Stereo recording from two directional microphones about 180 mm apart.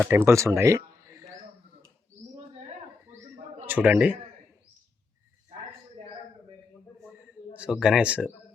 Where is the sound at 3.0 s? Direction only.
15° right (ahead or behind).